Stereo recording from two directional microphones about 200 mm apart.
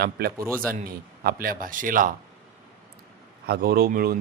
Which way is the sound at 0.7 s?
45° right (ahead or behind).